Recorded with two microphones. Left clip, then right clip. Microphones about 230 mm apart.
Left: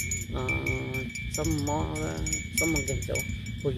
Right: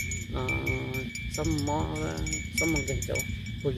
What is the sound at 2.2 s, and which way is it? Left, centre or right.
Speech, left.